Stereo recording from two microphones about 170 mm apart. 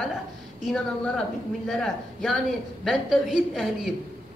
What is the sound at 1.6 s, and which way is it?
A woman's voice, centre (ahead or behind).